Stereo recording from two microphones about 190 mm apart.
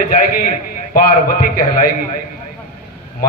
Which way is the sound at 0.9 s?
50° left (ahead or behind).